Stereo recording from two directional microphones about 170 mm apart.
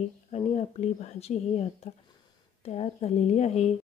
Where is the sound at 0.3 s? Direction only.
40° left (ahead or behind).